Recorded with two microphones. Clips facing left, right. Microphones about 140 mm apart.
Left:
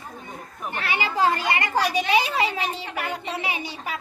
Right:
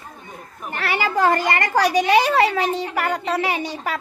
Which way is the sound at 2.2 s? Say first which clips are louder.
Right 7 dB; 75° right (ahead or behind).